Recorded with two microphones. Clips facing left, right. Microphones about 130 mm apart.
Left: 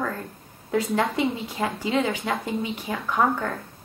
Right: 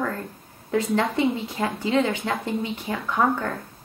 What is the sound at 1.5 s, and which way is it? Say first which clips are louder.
Speech: even; 10° left (ahead or behind).